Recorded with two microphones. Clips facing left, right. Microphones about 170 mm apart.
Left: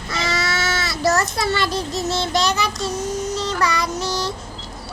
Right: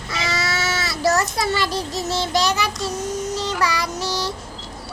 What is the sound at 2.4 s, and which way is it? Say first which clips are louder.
Speech: even; 10° right (ahead or behind).